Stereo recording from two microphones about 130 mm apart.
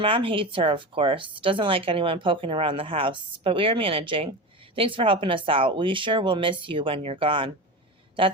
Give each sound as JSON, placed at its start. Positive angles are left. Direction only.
{"t": 0.0, "sound": "speech", "side_deg": -40}